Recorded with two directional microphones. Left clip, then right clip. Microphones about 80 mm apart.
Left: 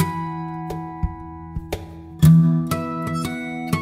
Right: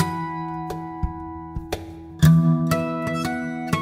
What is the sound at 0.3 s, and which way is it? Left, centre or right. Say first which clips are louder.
Music: right 1 dB; centre.